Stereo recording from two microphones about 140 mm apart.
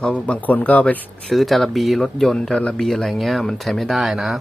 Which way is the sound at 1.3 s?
Centre (ahead or behind).